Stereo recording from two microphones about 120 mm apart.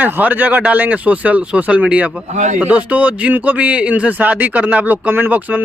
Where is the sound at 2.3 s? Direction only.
90° right.